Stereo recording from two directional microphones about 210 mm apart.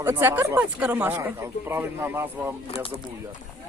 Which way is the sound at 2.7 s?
30° left (ahead or behind).